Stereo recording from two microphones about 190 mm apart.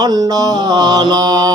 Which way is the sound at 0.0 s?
20° right (ahead or behind).